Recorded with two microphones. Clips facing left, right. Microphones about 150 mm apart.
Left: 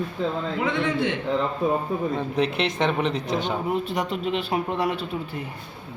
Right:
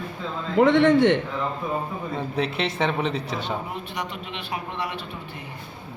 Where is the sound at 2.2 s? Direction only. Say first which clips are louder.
Right 2 dB; centre (ahead or behind).